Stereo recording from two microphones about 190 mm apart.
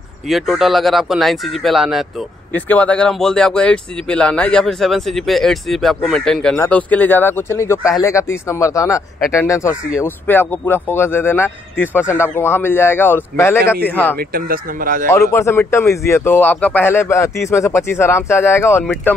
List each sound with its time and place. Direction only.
0.3 s a man's voice: centre (ahead or behind)
14.1 s speech: 50° right (ahead or behind)
15.0 s a man's voice: 15° left (ahead or behind)